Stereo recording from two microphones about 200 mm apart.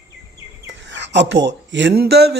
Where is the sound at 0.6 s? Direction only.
65° right (ahead or behind).